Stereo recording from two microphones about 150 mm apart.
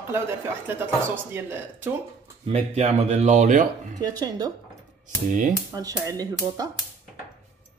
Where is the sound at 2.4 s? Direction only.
45° right (ahead or behind).